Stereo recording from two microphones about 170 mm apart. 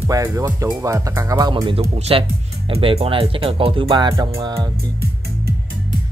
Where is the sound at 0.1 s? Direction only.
20° right (ahead or behind).